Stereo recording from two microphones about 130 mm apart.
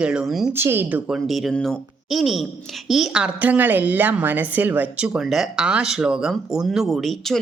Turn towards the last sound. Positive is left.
turn(degrees=0)  # may be behind; listen again after turning